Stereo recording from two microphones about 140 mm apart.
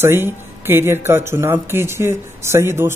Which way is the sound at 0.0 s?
15° right (ahead or behind).